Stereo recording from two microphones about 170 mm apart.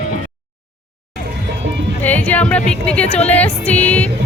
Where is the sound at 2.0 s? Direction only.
10° left (ahead or behind).